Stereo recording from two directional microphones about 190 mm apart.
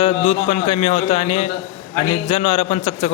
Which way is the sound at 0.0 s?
35° left (ahead or behind).